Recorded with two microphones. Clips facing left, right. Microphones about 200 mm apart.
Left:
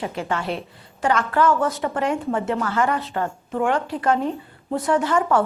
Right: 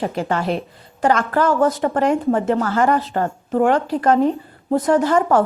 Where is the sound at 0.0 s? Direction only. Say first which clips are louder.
Right 5 dB; 40° right (ahead or behind).